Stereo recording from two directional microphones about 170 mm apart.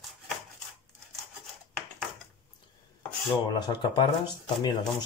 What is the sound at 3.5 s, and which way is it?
Speech, 25° left (ahead or behind).